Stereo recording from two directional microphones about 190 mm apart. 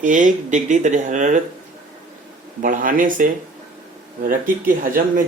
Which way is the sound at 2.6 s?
45° right (ahead or behind).